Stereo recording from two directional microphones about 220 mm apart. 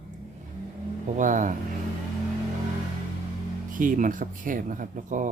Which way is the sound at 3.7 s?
35° right (ahead or behind).